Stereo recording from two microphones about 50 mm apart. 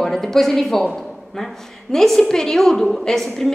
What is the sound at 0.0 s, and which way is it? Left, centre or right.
A woman's voice, centre.